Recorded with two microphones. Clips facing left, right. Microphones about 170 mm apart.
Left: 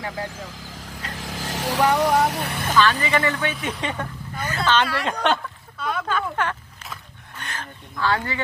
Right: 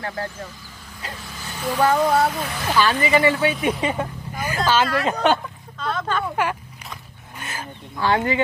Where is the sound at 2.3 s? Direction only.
65° left (ahead or behind).